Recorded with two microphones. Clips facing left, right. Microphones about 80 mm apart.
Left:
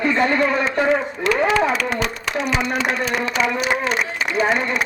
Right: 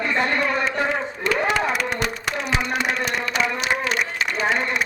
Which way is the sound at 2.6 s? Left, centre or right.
Left.